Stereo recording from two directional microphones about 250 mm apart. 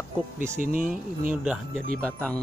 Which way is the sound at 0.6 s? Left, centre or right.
Right.